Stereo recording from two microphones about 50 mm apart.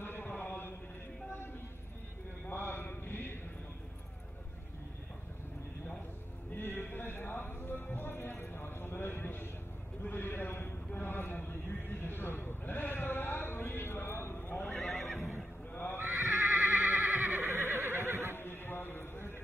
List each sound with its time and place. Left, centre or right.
0.0 s a sound: left
2.5 s chant: left
6.5 s music: left
10.0 s a sound: left
12.0 s sheep: left
14.5 s neigh: left
14.8 s neigh: centre
15.7 s neigh: left
16.0 s neigh: right
17.5 s neigh: right
18.4 s clip-clop: left